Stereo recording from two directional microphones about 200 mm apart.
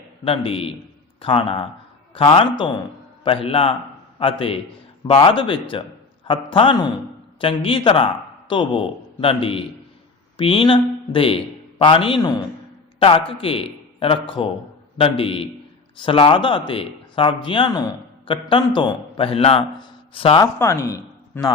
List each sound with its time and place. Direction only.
0.3 s a man's voice: 30° left (ahead or behind)
20.4 s speech: 15° left (ahead or behind)